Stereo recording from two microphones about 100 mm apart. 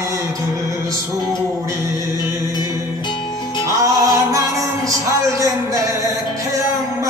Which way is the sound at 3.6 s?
30° right (ahead or behind).